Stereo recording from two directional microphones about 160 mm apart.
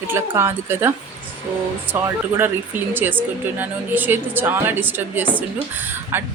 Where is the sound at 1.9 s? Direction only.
15° right (ahead or behind).